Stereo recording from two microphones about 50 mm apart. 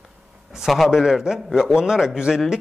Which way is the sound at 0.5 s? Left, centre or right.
Centre.